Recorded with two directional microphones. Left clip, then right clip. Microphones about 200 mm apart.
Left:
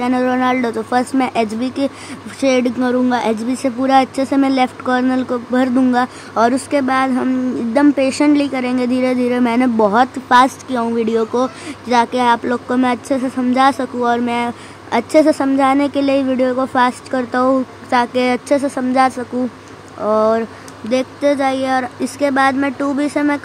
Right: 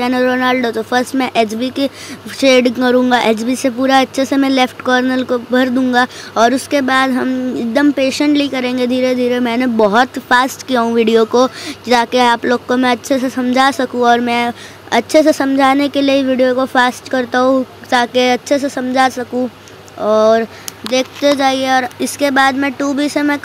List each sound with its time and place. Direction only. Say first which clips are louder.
0.0 s speech: right 2 dB; 15° right (ahead or behind)